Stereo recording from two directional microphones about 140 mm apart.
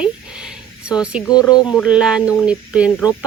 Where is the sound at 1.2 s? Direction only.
25° left (ahead or behind).